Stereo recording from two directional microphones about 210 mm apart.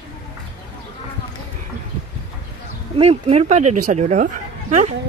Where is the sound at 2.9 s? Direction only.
30° right (ahead or behind).